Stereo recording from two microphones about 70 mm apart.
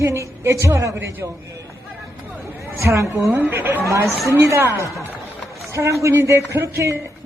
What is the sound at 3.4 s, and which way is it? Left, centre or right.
A woman's voice, right.